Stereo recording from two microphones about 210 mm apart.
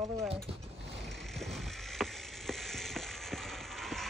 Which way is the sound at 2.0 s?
Centre (ahead or behind).